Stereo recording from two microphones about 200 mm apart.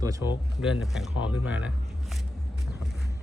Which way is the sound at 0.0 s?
15° right (ahead or behind).